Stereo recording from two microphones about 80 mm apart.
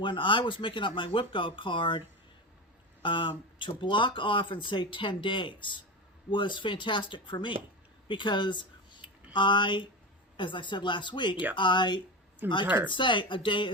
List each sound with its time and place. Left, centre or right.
0.0 s speech: left
12.6 s speech: centre
12.9 s speech: left